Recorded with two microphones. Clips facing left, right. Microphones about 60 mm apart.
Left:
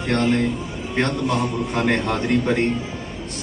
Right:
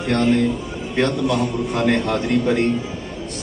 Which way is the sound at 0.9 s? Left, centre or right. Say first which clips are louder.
Right 2 dB; centre.